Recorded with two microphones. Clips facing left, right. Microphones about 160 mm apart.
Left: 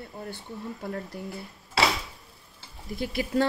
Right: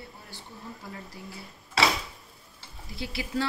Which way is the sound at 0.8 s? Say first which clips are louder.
Left 8 dB; 55° left (ahead or behind).